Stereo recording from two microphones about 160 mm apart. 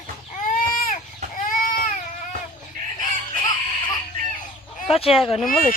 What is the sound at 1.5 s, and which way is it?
Baby cry, 60° left (ahead or behind).